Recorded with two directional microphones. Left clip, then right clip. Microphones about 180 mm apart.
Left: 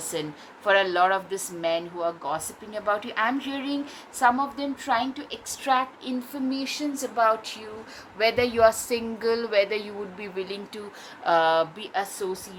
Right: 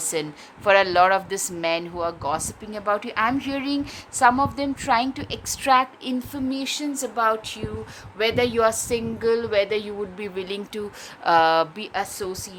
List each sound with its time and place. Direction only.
0.1 s speech: 50° right (ahead or behind)